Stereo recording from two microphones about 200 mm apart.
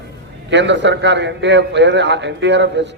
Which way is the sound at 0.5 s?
60° right (ahead or behind).